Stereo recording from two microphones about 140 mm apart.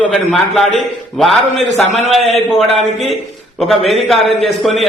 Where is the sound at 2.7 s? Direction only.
50° right (ahead or behind).